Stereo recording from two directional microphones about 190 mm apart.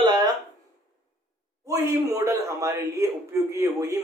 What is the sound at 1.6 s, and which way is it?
A man's voice, 15° right (ahead or behind).